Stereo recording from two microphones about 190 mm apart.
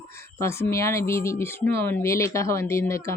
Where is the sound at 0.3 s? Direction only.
15° left (ahead or behind).